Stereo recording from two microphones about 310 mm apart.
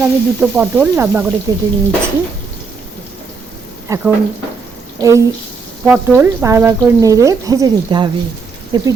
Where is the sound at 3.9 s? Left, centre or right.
Centre.